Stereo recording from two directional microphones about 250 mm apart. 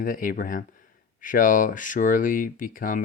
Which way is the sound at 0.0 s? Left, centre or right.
Left.